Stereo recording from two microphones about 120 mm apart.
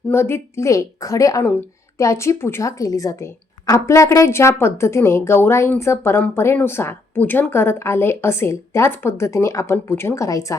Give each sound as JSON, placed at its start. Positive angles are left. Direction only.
{"t": 0.1, "sound": "a woman's voice", "side_deg": 20}